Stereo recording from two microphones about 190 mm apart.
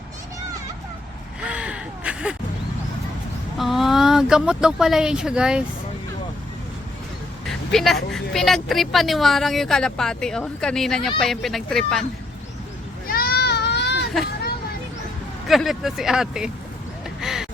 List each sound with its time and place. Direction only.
1.4 s gasp: 5° right (ahead or behind)
3.6 s a woman's voice: centre (ahead or behind)
7.4 s a woman's voice: centre (ahead or behind)
13.1 s goat: 55° left (ahead or behind)
15.4 s a woman's voice: centre (ahead or behind)
17.2 s duck: 5° right (ahead or behind)